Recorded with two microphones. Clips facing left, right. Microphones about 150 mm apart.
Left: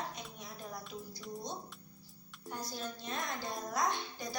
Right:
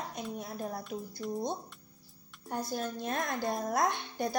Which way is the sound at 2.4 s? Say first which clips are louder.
Right 7 dB; 50° right (ahead or behind).